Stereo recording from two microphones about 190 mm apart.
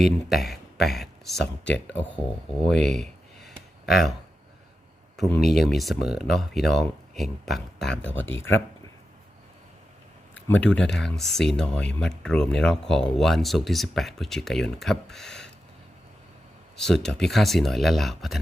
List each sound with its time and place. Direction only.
0.0 s speech: centre (ahead or behind)
1.4 s speech: 70° left (ahead or behind)
2.8 s a sound: centre (ahead or behind)
5.1 s speech: centre (ahead or behind)
8.0 s speech: 90° left
10.3 s speech: 5° left (ahead or behind)
16.7 s speech: 5° left (ahead or behind)